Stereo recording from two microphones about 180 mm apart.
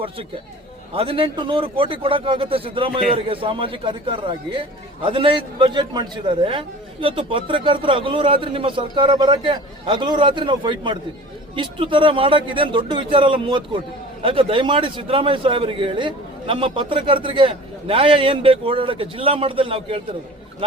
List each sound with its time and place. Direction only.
0.9 s a man's voice: 30° right (ahead or behind)